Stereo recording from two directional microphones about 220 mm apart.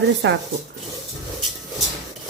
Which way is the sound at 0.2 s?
55° right (ahead or behind).